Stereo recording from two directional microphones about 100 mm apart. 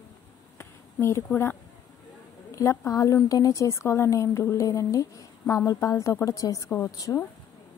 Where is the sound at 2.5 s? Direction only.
30° left (ahead or behind).